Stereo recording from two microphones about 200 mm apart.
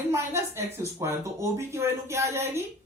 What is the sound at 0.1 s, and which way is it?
Speech, 15° right (ahead or behind).